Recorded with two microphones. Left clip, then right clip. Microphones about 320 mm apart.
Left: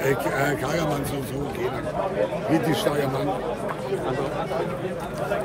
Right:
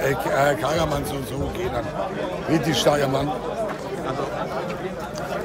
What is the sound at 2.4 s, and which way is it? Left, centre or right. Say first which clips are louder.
Speech: right 6 dB; centre.